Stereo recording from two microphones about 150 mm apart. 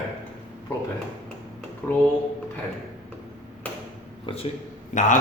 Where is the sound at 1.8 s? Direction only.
10° left (ahead or behind).